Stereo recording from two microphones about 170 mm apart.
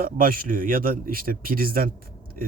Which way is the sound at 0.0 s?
55° right (ahead or behind).